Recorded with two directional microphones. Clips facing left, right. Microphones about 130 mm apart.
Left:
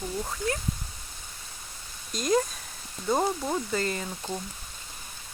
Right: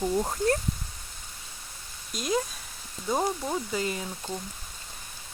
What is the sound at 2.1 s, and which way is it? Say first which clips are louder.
Speech: left 3 dB; 5° right (ahead or behind).